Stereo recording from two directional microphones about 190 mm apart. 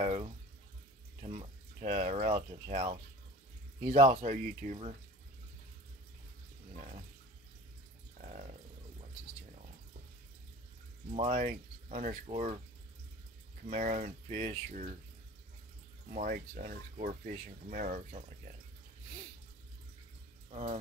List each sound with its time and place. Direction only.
0.0 s speech: 30° right (ahead or behind)
8.2 s water: 40° right (ahead or behind)
11.1 s speech: 40° right (ahead or behind)
13.7 s speech: 40° right (ahead or behind)
16.1 s speech: 45° right (ahead or behind)
20.5 s speech: 35° right (ahead or behind)